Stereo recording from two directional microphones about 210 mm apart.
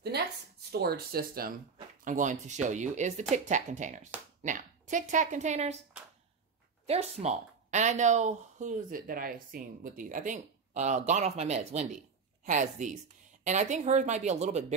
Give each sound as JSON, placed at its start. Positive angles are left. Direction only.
{"t": 0.7, "sound": "a woman's voice", "side_deg": -50}
{"t": 6.9, "sound": "speech", "side_deg": -30}